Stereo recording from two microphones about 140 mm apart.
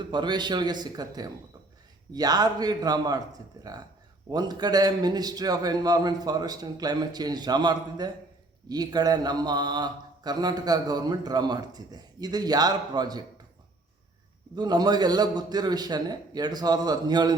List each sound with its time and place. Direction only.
0.0 s a man's voice: 30° right (ahead or behind)
14.5 s speech: 30° right (ahead or behind)